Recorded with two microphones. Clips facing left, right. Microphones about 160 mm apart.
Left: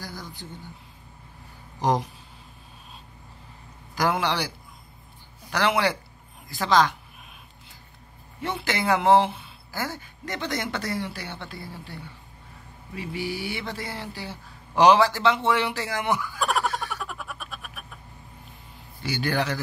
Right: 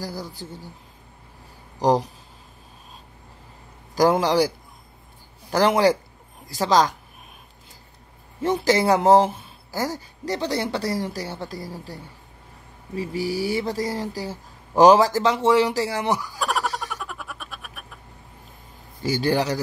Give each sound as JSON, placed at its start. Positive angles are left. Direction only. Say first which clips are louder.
{"t": 0.0, "sound": "speech", "louder": "right 6 dB", "side_deg": -35}
{"t": 1.8, "sound": "speech", "louder": "right 4 dB", "side_deg": -35}
{"t": 3.9, "sound": "speech", "louder": "right 7 dB", "side_deg": -40}
{"t": 5.5, "sound": "speech", "louder": "right 6 dB", "side_deg": -40}
{"t": 8.4, "sound": "speech", "louder": "right 9 dB", "side_deg": -40}
{"t": 16.3, "sound": "a sound", "louder": "even", "side_deg": 0}
{"t": 19.0, "sound": "speech", "louder": "right 5 dB", "side_deg": -35}